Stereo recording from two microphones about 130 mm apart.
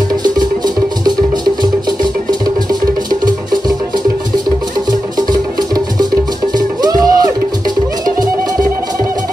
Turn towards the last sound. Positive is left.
turn(degrees=-30)  # may be behind; listen again after turning